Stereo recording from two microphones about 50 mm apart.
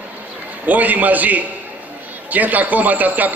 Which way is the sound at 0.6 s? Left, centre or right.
Right.